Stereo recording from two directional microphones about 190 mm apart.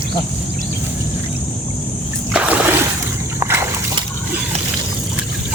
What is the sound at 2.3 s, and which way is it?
Splash, 5° right (ahead or behind).